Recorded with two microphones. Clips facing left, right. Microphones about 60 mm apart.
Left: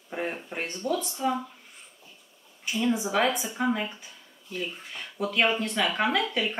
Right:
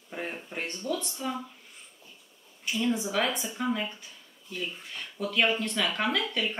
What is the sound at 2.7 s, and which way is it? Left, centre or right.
Speech, centre.